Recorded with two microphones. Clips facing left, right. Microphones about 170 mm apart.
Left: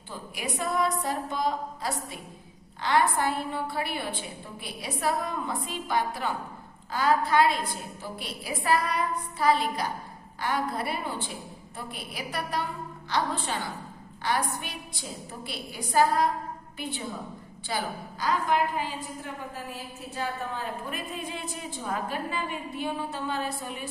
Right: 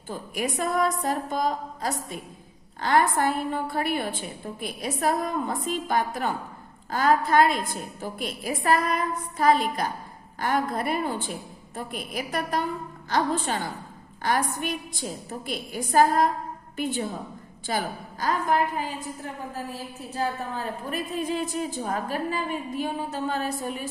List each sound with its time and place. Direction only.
0.3 s a woman's voice: 45° right (ahead or behind)